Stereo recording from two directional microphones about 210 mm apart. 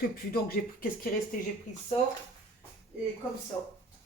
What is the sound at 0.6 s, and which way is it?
Speech, 45° left (ahead or behind).